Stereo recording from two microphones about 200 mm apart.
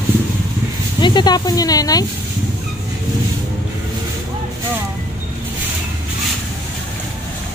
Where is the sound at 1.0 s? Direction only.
20° left (ahead or behind).